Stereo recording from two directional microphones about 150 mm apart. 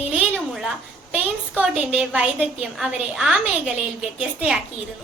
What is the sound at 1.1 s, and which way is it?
A woman's voice, 10° right (ahead or behind).